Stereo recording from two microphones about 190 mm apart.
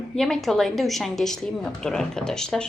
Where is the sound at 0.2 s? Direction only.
Centre (ahead or behind).